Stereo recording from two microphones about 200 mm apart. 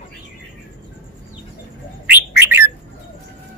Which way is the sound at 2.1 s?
10° right (ahead or behind).